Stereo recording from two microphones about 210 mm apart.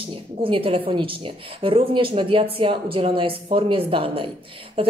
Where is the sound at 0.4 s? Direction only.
25° right (ahead or behind).